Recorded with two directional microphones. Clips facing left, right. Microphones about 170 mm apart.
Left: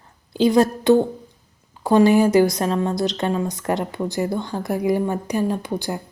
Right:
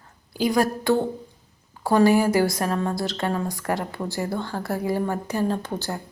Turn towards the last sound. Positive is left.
turn(degrees=15)  # may be behind; listen again after turning